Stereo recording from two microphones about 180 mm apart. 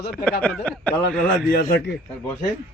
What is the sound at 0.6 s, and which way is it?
Speech, 10° left (ahead or behind).